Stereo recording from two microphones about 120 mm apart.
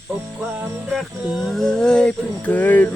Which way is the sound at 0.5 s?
15° right (ahead or behind).